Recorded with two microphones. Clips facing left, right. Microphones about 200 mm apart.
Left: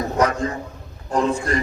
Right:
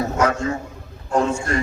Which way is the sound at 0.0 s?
35° left (ahead or behind).